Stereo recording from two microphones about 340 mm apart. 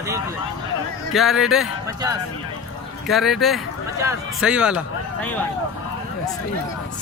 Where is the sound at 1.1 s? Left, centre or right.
Centre.